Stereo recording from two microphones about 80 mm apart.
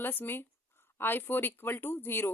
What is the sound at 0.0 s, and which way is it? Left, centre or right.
A woman's voice, left.